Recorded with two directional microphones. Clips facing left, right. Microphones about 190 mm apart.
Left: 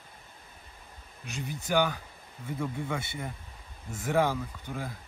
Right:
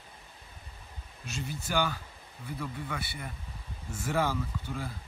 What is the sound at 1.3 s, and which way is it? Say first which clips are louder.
Speech: left 3 dB; 15° left (ahead or behind).